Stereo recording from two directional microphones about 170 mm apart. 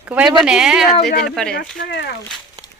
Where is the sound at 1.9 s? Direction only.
75° left (ahead or behind).